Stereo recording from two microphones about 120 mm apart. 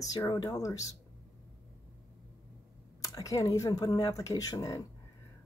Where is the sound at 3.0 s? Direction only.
25° left (ahead or behind).